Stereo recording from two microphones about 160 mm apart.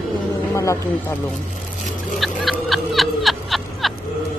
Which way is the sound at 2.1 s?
Centre (ahead or behind).